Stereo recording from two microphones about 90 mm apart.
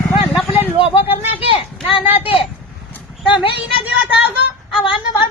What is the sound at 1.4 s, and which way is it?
Speech, 75° left (ahead or behind).